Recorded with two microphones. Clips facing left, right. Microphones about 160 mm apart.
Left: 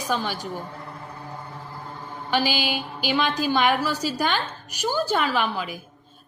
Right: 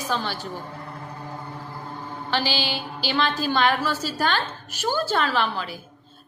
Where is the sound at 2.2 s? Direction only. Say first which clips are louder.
Left 2 dB; 15° left (ahead or behind).